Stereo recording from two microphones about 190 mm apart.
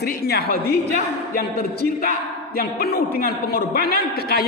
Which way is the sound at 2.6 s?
55° left (ahead or behind).